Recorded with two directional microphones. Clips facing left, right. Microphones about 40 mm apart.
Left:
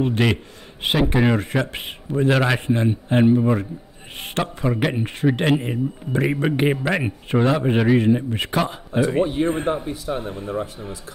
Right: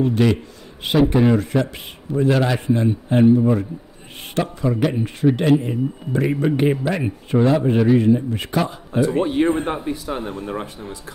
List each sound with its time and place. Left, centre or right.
0.0 s a man's voice: left
9.7 s speech: right